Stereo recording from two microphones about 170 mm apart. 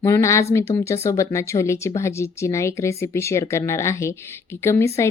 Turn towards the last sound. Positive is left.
turn(degrees=15)  # may be behind; listen again after turning